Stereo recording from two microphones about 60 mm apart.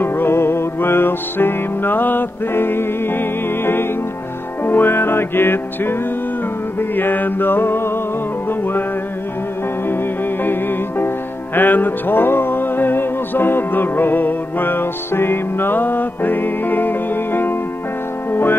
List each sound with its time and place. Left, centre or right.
0.0 s music: left
6.8 s mantra: left
10.4 s music: left